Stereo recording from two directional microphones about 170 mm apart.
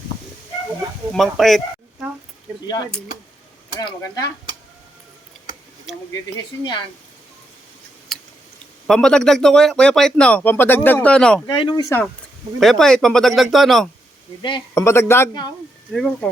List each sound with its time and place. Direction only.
1.1 s speech: centre (ahead or behind)
3.8 s speech: 20° left (ahead or behind)
6.3 s speech: 30° left (ahead or behind)
8.1 s a sound: centre (ahead or behind)
8.9 s speech: 5° left (ahead or behind)
11.4 s speech: 25° left (ahead or behind)
12.5 s speech: centre (ahead or behind)
14.8 s a man's voice: 15° left (ahead or behind)
15.9 s speech: 5° left (ahead or behind)